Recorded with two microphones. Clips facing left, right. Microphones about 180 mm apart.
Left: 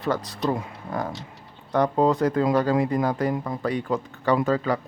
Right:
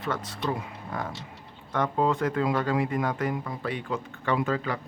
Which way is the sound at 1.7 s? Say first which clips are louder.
Left 5 dB; 35° left (ahead or behind).